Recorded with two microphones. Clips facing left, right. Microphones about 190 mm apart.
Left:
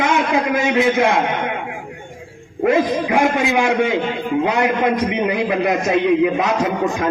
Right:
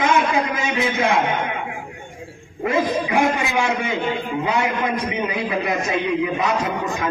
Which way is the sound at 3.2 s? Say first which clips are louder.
Left 4 dB; 65° left (ahead or behind).